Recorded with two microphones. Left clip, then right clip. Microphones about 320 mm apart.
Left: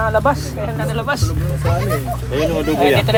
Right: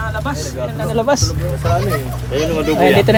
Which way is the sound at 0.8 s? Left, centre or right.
Centre.